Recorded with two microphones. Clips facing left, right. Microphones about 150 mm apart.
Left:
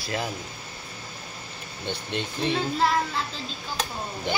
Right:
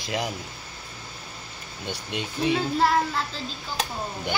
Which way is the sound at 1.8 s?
10° right (ahead or behind).